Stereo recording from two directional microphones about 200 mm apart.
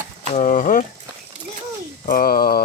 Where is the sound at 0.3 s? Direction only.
40° left (ahead or behind).